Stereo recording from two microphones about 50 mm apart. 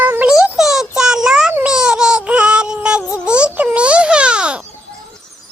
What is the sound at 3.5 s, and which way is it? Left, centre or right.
Music, right.